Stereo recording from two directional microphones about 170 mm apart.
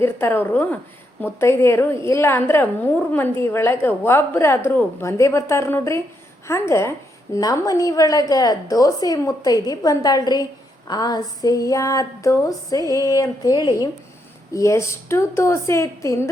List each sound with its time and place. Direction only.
0.0 s a woman's voice: 15° left (ahead or behind)